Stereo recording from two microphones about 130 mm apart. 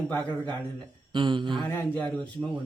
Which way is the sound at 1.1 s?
40° right (ahead or behind).